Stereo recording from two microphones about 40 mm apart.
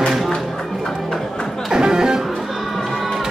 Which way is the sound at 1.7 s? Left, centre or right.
Centre.